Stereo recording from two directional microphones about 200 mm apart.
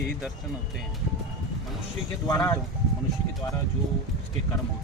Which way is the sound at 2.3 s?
15° left (ahead or behind).